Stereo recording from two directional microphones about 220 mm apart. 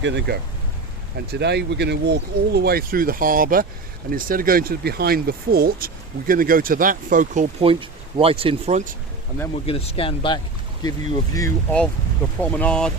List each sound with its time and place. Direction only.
0.0 s speech: 55° right (ahead or behind); by 7.4 s 35° right (ahead or behind)
7.6 s speech: 25° right (ahead or behind)
9.6 s speech: 25° left (ahead or behind)
11.3 s speech: 10° left (ahead or behind)